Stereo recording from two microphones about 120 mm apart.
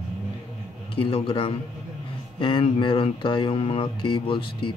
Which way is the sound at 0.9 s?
50° left (ahead or behind).